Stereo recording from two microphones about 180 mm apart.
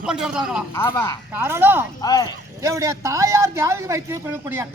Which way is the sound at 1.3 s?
15° right (ahead or behind).